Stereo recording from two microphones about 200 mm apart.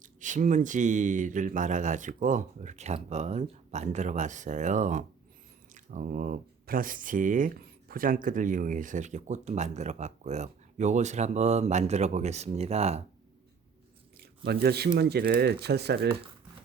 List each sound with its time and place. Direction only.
0.0 s speech: 40° right (ahead or behind)
14.2 s a sound: 50° right (ahead or behind)
14.9 s speech: 55° right (ahead or behind)